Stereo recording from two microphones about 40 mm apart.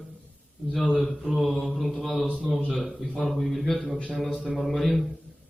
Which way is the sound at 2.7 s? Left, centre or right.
Centre.